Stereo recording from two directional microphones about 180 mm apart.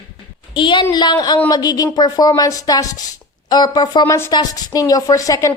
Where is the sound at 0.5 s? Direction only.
25° left (ahead or behind).